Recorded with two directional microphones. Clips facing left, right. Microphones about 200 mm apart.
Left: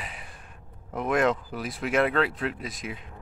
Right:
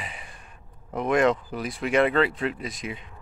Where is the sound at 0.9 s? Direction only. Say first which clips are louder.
Right 3 dB; centre (ahead or behind).